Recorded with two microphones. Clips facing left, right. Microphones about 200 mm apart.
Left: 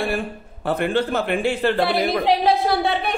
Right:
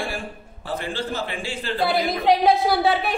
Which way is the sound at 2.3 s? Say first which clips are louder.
Right 3 dB; centre (ahead or behind).